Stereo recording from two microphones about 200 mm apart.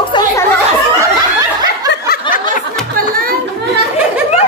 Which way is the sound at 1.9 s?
50° left (ahead or behind).